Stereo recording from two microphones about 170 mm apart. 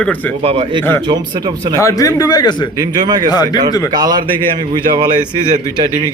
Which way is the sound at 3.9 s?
25° right (ahead or behind).